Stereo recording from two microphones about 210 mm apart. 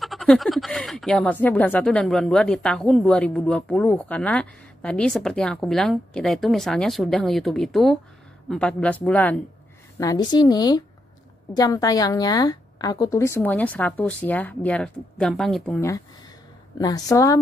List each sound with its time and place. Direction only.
0.0 s speech: centre (ahead or behind)
9.9 s a woman's voice: 20° left (ahead or behind); by 15.8 s centre (ahead or behind)
16.7 s a woman's voice: 15° left (ahead or behind)